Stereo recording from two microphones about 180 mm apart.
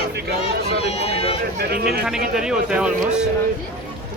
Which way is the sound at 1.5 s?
60° right (ahead or behind).